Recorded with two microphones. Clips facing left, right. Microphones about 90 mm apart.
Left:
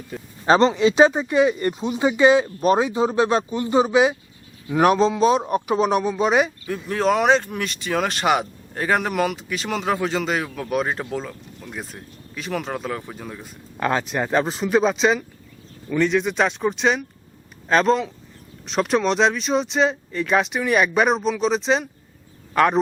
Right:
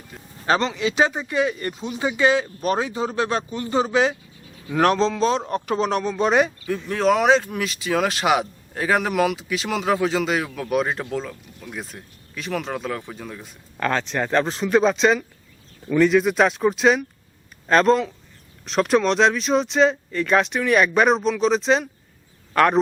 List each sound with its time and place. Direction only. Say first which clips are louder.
0.4 s a man's voice: left 5 dB; 25° left (ahead or behind); by 22.8 s centre (ahead or behind)